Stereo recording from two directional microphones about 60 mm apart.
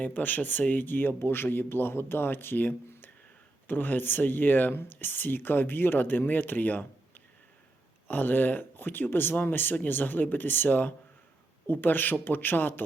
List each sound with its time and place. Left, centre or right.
0.0 s speech: left